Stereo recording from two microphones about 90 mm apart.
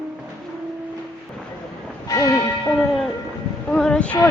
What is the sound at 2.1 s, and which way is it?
Church bell, 40° left (ahead or behind).